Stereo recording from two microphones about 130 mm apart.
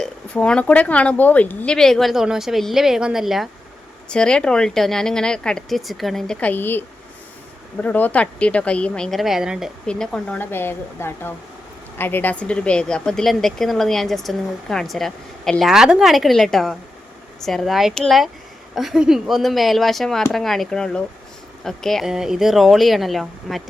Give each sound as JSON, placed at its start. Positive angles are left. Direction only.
{"t": 0.0, "sound": "speech", "side_deg": 5}